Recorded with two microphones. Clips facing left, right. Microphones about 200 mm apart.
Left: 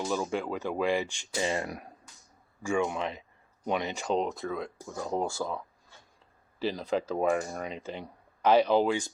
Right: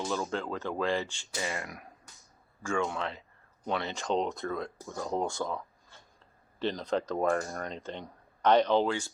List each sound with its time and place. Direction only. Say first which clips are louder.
0.1 s speech: left 2 dB; 15° left (ahead or behind)
1.4 s speech: left 6 dB; 35° left (ahead or behind)
2.6 s speech: left 3 dB; 15° left (ahead or behind)